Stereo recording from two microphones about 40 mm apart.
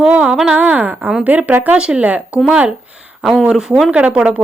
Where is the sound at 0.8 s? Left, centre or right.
Right.